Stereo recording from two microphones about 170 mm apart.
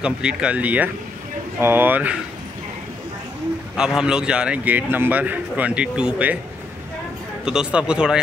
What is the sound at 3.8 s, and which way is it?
A man's voice, 5° right (ahead or behind).